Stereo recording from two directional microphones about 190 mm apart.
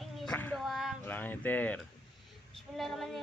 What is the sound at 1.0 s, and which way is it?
A woman's voice, 10° left (ahead or behind).